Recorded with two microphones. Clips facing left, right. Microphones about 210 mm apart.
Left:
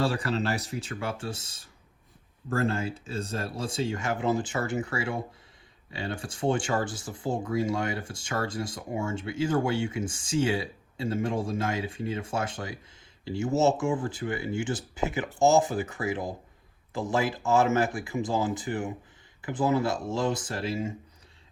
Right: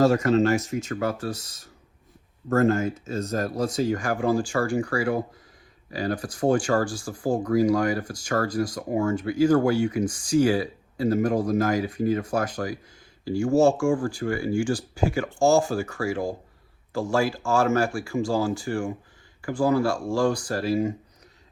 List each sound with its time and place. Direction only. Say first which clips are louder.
0.0 s speech: right 9 dB; 30° left (ahead or behind)